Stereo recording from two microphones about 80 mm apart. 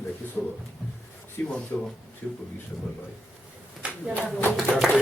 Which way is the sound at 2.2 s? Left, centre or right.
Centre.